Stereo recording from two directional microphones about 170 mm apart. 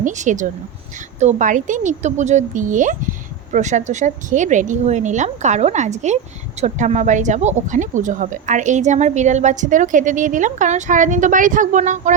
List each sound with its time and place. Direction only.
0.0 s speech: 45° right (ahead or behind)